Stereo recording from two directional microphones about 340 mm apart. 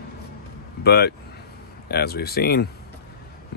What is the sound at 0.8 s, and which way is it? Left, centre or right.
Speech, left.